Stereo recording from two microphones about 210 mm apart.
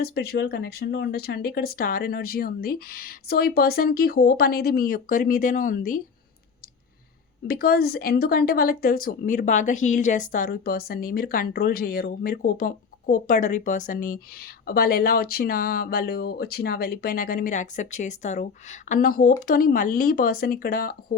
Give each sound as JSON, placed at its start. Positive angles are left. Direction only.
{"t": 0.0, "sound": "speech", "side_deg": 50}
{"t": 7.4, "sound": "speech", "side_deg": 45}